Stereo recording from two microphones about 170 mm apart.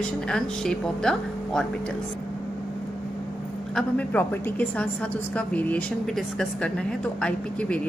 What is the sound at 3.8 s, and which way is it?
Speech, 10° left (ahead or behind).